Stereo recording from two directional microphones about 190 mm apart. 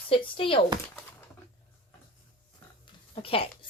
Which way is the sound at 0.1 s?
30° left (ahead or behind).